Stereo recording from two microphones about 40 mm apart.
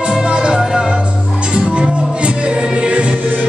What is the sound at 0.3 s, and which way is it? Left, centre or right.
Music, right.